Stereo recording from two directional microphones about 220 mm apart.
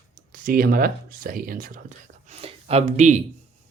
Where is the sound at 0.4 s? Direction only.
40° right (ahead or behind).